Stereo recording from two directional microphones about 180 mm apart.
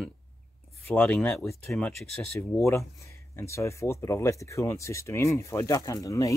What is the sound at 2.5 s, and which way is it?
Speech, 15° left (ahead or behind).